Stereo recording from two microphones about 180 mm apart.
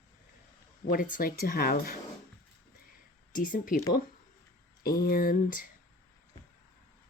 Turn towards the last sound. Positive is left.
turn(degrees=50)  # may be behind; listen again after turning